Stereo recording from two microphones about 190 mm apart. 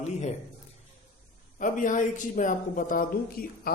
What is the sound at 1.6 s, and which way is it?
A man's voice, 45° left (ahead or behind).